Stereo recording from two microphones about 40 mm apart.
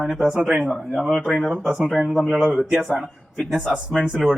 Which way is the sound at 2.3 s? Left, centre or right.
Centre.